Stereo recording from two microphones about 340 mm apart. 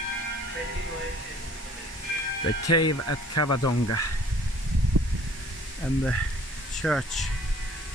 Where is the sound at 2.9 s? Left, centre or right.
Left.